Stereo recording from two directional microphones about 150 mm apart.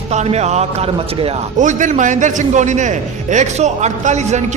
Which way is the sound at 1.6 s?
60° right (ahead or behind).